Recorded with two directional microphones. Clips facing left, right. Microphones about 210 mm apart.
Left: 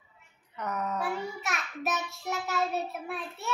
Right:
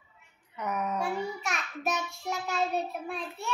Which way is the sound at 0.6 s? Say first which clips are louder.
Right 1 dB; 10° right (ahead or behind).